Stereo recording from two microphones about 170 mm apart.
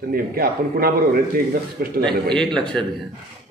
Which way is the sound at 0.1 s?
60° right (ahead or behind).